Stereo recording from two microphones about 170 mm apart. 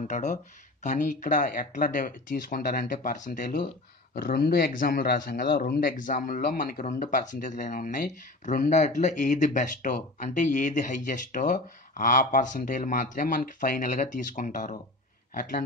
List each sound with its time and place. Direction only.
0.1 s speech: 45° left (ahead or behind)
4.1 s speech: 60° left (ahead or behind)